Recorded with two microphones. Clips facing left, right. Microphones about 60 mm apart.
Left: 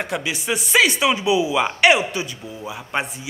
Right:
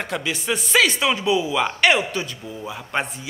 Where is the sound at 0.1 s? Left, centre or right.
Centre.